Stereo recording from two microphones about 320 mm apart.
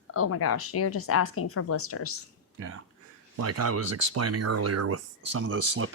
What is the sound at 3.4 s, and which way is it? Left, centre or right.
Speech, right.